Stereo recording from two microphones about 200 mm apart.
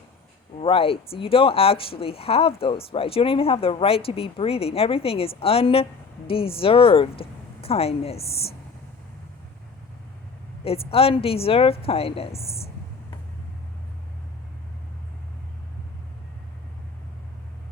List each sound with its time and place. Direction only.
0.6 s speech: 25° left (ahead or behind)
10.6 s speech: 30° left (ahead or behind)